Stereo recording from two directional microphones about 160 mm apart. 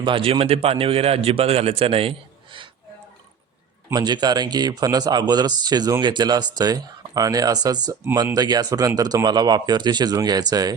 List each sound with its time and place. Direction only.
0.0 s a man's voice: 35° right (ahead or behind)
3.8 s speech: 25° right (ahead or behind)